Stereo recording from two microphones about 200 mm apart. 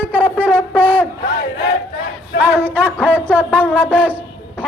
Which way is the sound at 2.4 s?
10° right (ahead or behind).